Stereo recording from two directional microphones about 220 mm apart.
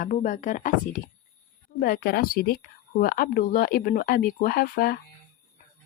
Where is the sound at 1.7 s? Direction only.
45° left (ahead or behind).